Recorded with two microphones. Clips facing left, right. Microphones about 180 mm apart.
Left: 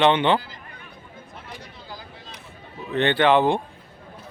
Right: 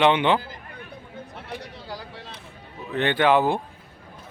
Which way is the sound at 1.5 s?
75° right (ahead or behind).